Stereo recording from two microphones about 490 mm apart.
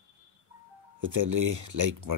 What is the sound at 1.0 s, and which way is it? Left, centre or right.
Speech, right.